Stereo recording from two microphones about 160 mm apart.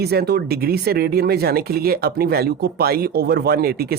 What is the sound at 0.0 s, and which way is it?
Speech, 85° right.